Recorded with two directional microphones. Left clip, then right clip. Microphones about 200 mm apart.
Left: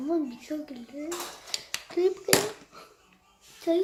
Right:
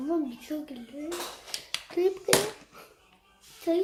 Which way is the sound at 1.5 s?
20° left (ahead or behind).